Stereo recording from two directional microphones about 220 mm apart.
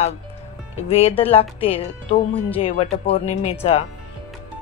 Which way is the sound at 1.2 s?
25° left (ahead or behind).